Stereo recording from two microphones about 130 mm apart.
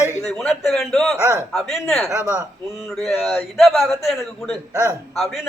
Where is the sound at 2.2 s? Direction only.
10° right (ahead or behind).